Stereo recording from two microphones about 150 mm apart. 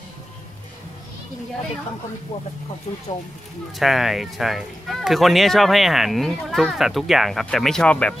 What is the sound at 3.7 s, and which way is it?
Speech, centre (ahead or behind).